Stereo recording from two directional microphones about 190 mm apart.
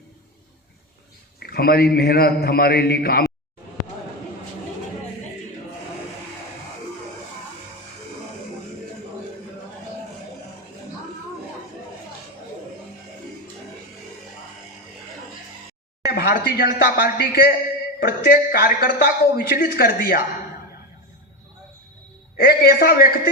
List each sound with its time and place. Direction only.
1.4 s a man's voice: 55° left (ahead or behind)
16.1 s a sound: 55° left (ahead or behind)
16.7 s a man's voice: 50° left (ahead or behind)
22.4 s a man's voice: 50° left (ahead or behind)